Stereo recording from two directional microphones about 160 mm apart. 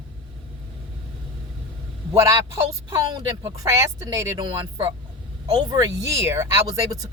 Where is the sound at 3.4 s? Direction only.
20° right (ahead or behind).